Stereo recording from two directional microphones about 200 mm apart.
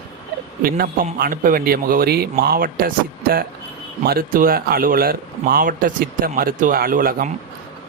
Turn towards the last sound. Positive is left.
turn(degrees=-45)  # may be behind; listen again after turning